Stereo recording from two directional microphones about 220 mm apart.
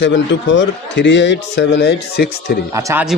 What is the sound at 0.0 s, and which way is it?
A man's voice, 55° left (ahead or behind).